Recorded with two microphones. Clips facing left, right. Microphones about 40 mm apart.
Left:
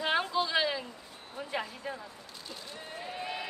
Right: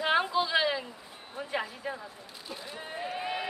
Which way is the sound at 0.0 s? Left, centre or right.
Centre.